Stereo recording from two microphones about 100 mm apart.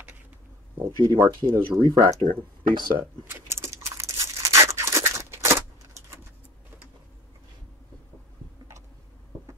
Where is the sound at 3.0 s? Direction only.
20° right (ahead or behind).